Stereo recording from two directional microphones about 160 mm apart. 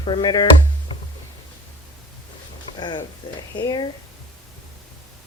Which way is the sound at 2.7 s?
30° left (ahead or behind).